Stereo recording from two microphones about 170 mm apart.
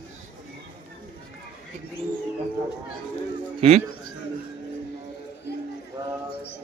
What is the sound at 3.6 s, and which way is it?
Speech, 40° right (ahead or behind).